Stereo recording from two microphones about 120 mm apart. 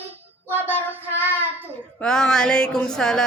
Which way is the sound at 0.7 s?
15° right (ahead or behind).